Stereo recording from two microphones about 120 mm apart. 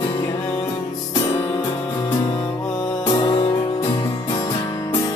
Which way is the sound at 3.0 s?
35° left (ahead or behind).